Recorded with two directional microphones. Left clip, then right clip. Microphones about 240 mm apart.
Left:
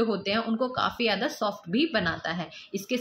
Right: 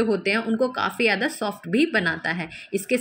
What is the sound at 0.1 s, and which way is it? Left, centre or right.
A woman's voice, centre.